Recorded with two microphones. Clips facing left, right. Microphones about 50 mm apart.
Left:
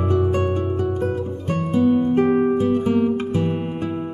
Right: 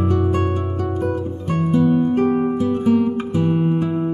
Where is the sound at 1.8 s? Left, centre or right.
Centre.